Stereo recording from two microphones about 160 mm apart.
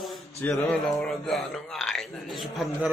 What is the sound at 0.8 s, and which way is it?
A man's voice, centre (ahead or behind).